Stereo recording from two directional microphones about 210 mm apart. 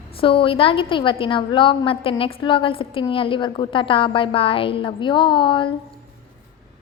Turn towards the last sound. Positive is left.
turn(degrees=25)  # may be behind; listen again after turning